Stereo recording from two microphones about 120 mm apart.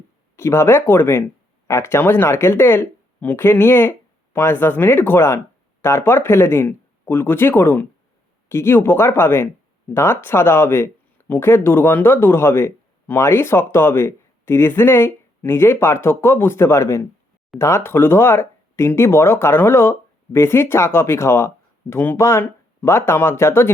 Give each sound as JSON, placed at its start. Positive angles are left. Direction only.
{"t": 0.3, "sound": "speech", "side_deg": 20}